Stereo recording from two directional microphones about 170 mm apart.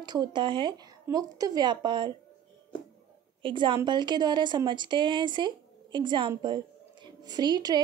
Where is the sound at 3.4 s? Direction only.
30° right (ahead or behind).